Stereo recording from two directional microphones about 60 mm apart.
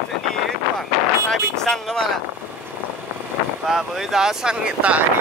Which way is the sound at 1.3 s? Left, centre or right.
Centre.